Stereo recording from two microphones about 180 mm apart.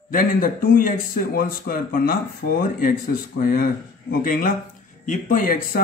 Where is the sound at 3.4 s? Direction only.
55° left (ahead or behind).